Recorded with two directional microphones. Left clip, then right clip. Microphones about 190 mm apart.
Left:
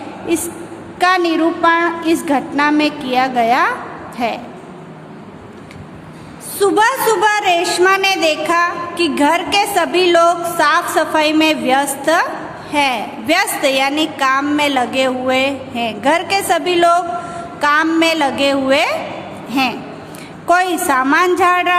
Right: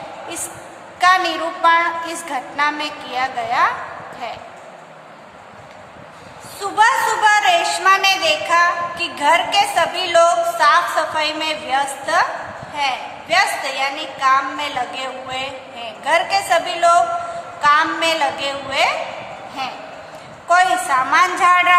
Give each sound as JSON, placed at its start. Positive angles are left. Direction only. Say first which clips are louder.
{"t": 0.9, "sound": "a woman's voice", "louder": "left 1 dB", "side_deg": 35}
{"t": 6.6, "sound": "a woman's voice", "louder": "left 2 dB", "side_deg": 45}
{"t": 20.5, "sound": "a woman's voice", "louder": "left 1 dB", "side_deg": 45}